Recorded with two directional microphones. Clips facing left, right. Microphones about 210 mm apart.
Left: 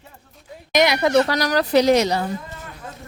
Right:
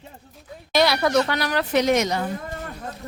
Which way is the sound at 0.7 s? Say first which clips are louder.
Left 2 dB; 20° left (ahead or behind).